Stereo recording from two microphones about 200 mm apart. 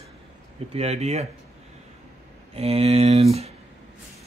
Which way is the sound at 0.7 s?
30° right (ahead or behind).